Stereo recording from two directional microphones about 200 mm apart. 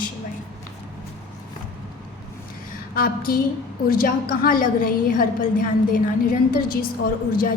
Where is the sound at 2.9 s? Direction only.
45° left (ahead or behind).